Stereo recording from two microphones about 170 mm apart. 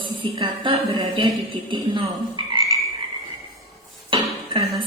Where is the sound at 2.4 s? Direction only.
30° right (ahead or behind).